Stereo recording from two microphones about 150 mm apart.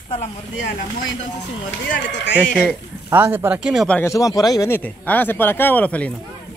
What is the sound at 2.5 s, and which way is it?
A man's voice, 10° right (ahead or behind).